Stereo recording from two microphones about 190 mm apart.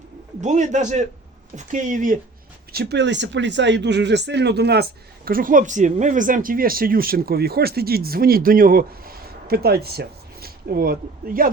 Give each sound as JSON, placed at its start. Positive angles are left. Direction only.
{"t": 0.4, "sound": "a man's voice", "side_deg": -40}
{"t": 2.7, "sound": "speech", "side_deg": -65}